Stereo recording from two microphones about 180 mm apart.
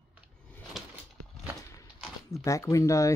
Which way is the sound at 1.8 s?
15° left (ahead or behind).